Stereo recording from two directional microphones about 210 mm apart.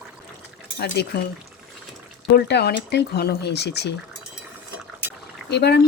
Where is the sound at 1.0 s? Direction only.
55° left (ahead or behind).